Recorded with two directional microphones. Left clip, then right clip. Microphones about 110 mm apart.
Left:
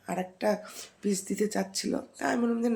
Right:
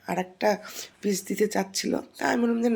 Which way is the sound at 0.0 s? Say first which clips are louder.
Right 4 dB; 25° right (ahead or behind).